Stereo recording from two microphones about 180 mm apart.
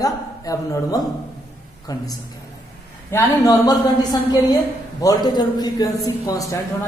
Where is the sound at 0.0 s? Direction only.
20° left (ahead or behind).